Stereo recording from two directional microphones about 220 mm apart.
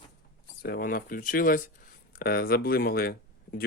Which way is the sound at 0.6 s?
45° left (ahead or behind).